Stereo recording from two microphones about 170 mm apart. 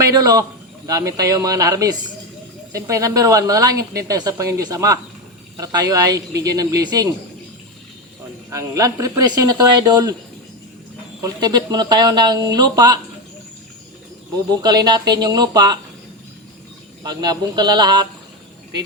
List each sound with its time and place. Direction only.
0.0 s a man's voice: 20° right (ahead or behind)
8.4 s a woman's voice: 20° right (ahead or behind)
11.2 s a woman's voice: 25° right (ahead or behind)
14.6 s a woman's voice: 25° right (ahead or behind)
17.1 s a woman's voice: 25° right (ahead or behind)